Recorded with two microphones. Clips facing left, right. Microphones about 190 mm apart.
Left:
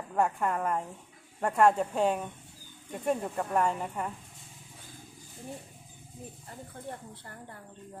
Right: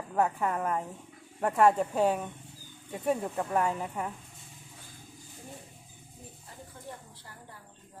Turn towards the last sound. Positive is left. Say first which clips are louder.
# left 3 dB
turn(degrees=55)  # may be behind; listen again after turning